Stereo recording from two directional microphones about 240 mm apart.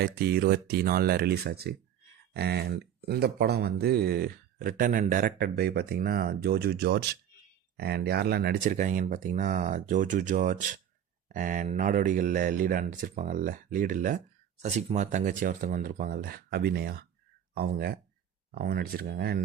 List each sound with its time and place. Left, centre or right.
0.0 s speech: right